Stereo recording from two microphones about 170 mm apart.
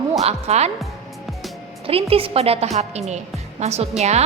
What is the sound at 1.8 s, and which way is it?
A woman's voice, 35° right (ahead or behind).